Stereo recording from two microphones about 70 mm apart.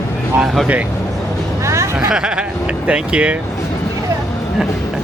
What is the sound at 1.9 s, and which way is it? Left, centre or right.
Speech, centre.